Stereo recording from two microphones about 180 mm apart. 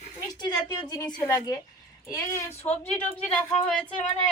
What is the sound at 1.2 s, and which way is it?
Speech, 20° left (ahead or behind).